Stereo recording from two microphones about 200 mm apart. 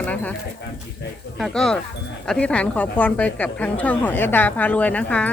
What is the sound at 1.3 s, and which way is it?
A woman's voice, centre (ahead or behind).